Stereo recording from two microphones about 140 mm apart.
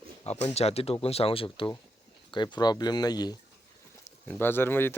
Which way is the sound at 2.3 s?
30° left (ahead or behind).